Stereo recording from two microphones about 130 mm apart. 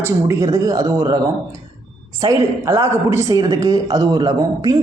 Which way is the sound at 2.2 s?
25° right (ahead or behind).